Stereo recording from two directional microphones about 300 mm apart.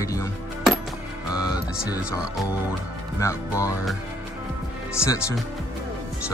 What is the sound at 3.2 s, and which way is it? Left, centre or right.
Speech, centre.